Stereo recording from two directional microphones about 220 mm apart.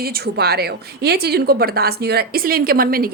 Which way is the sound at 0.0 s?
45° right (ahead or behind).